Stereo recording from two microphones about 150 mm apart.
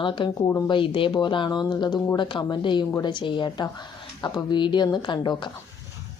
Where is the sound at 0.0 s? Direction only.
35° left (ahead or behind).